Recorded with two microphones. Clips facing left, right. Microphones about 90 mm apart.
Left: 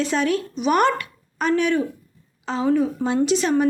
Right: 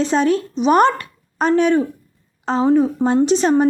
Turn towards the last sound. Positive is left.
turn(degrees=-35)  # may be behind; listen again after turning